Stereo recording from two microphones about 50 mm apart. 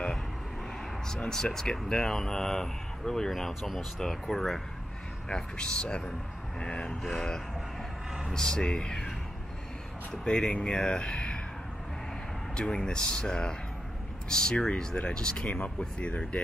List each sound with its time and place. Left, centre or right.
1.0 s speech: centre
5.3 s speech: left
7.0 s speech: centre
10.2 s speech: centre
12.5 s speech: centre
15.4 s speech: left